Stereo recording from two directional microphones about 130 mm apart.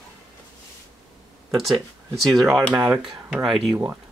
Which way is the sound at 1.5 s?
Centre (ahead or behind).